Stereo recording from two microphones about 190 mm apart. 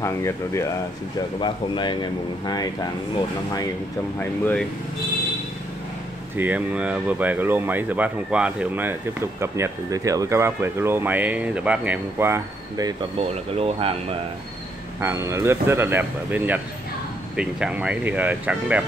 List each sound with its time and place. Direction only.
0.0 s speech: 15° left (ahead or behind)
4.2 s speech: 10° left (ahead or behind)
6.3 s speech: 10° right (ahead or behind)
13.2 s speech: 30° right (ahead or behind)
15.0 s speech: 15° right (ahead or behind)